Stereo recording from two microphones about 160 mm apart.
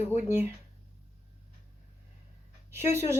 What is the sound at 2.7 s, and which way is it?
Speech, 15° right (ahead or behind).